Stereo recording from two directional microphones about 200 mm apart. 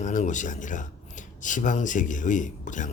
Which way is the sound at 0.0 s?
40° left (ahead or behind).